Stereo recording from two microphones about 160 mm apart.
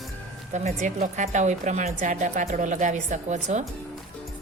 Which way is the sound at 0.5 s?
45° right (ahead or behind).